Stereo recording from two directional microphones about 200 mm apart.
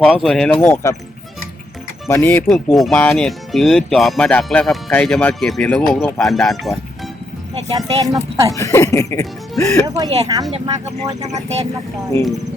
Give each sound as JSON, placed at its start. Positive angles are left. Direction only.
{"t": 0.0, "sound": "speech", "side_deg": 0}
{"t": 2.0, "sound": "speech", "side_deg": 10}
{"t": 7.7, "sound": "speech", "side_deg": -15}
{"t": 8.5, "sound": "speech", "side_deg": 15}
{"t": 9.8, "sound": "speech", "side_deg": -20}
{"t": 11.0, "sound": "speech", "side_deg": -35}